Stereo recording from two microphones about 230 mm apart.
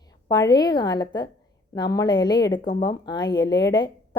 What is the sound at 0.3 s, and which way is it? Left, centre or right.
Speech, centre.